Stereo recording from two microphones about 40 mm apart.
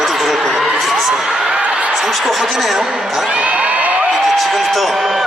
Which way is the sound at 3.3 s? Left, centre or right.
Right.